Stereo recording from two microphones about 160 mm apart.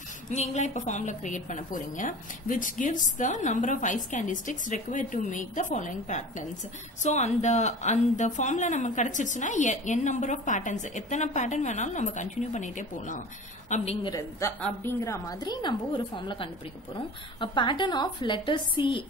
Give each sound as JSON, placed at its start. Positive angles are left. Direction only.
{"t": 0.3, "sound": "a woman's voice", "side_deg": 45}
{"t": 14.0, "sound": "a woman's voice", "side_deg": 25}